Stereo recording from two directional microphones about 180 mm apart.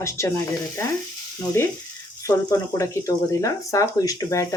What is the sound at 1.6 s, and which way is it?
Speech, 15° left (ahead or behind).